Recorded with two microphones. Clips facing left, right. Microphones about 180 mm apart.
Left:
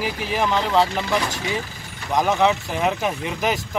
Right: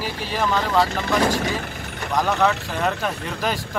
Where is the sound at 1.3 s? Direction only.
55° right (ahead or behind).